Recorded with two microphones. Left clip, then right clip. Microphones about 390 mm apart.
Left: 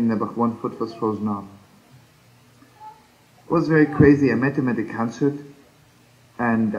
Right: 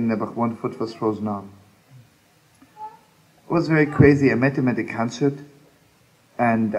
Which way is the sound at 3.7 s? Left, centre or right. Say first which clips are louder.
Left 1 dB; right.